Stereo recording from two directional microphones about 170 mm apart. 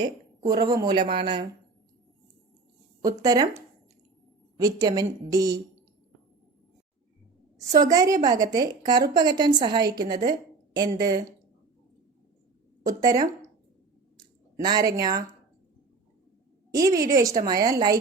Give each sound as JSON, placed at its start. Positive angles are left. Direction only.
{"t": 0.4, "sound": "a woman's voice", "side_deg": -25}
{"t": 3.0, "sound": "a woman's voice", "side_deg": -20}
{"t": 4.6, "sound": "a woman's voice", "side_deg": -20}
{"t": 7.7, "sound": "a woman's voice", "side_deg": -20}
{"t": 12.8, "sound": "speech", "side_deg": -20}
{"t": 14.6, "sound": "a woman's voice", "side_deg": -25}
{"t": 16.7, "sound": "a woman's voice", "side_deg": -20}